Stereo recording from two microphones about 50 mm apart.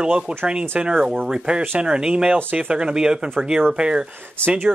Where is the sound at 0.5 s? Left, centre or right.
Centre.